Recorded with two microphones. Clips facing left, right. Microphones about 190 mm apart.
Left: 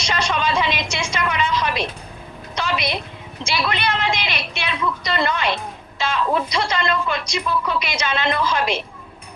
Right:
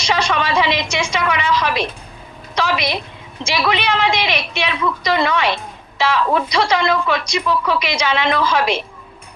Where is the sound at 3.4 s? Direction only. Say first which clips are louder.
Right 4 dB; 80° right.